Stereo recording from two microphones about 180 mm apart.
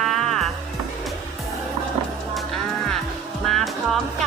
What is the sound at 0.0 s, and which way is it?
Music, centre (ahead or behind).